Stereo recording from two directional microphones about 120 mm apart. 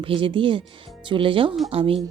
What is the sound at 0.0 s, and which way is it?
Speech, 45° right (ahead or behind).